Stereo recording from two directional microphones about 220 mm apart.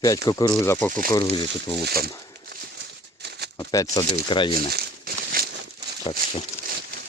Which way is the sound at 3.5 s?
15° left (ahead or behind).